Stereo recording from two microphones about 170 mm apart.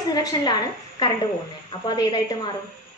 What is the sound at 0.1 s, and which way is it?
A woman's voice, 25° left (ahead or behind).